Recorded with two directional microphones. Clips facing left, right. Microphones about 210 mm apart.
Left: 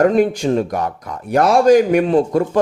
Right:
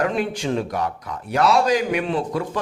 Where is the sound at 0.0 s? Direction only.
45° left (ahead or behind).